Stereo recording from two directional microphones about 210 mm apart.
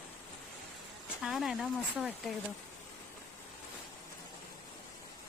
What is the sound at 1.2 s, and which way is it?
Speech, centre (ahead or behind).